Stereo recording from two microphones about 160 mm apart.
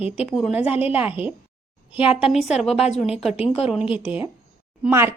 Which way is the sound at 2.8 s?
40° left (ahead or behind).